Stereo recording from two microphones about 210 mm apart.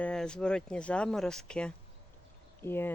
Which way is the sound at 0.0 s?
5° left (ahead or behind).